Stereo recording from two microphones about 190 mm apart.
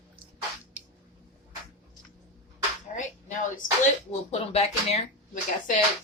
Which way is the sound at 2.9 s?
40° left (ahead or behind).